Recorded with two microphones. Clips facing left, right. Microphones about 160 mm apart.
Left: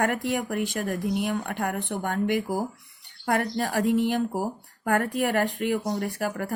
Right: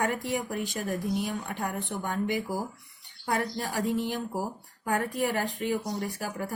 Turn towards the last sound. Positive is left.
turn(degrees=60)  # may be behind; listen again after turning